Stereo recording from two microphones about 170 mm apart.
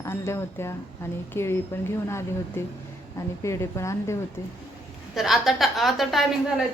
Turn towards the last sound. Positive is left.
turn(degrees=0)  # may be behind; listen again after turning